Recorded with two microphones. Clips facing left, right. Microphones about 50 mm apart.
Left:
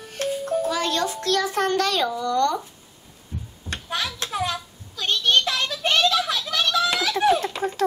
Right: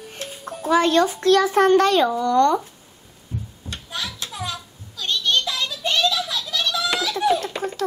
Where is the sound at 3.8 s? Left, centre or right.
Left.